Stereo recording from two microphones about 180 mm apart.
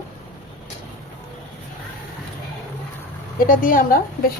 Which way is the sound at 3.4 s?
50° left (ahead or behind).